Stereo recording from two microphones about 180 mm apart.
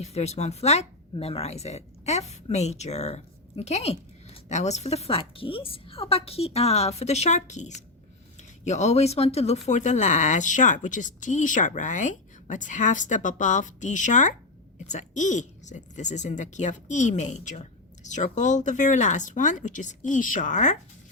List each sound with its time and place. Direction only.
0.0 s speech: 35° left (ahead or behind)